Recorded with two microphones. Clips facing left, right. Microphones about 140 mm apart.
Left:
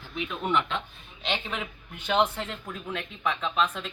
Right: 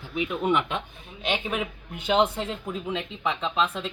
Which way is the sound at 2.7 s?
15° right (ahead or behind).